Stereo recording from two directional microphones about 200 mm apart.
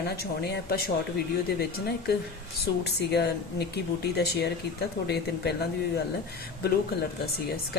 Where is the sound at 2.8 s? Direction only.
55° left (ahead or behind).